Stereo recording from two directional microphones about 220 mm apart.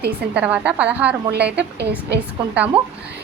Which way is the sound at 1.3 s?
50° right (ahead or behind).